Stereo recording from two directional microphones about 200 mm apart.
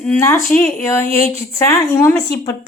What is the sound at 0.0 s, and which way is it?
Speech, 10° left (ahead or behind).